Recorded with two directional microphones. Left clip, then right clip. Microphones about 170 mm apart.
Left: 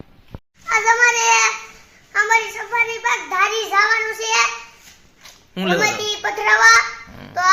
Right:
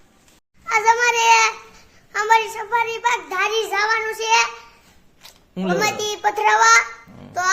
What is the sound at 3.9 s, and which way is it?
Child singing, 35° right (ahead or behind).